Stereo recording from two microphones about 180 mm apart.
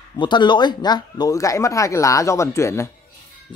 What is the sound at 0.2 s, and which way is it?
Speech, 25° left (ahead or behind).